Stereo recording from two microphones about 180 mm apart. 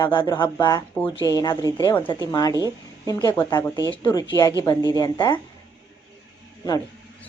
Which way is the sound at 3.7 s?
20° right (ahead or behind).